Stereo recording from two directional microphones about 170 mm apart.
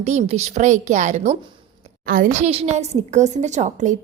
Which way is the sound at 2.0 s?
55° right (ahead or behind).